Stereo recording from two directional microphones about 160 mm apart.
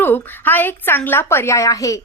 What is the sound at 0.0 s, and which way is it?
A woman's voice, 10° left (ahead or behind).